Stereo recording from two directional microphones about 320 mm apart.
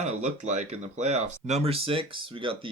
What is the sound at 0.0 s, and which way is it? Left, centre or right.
Speech, right.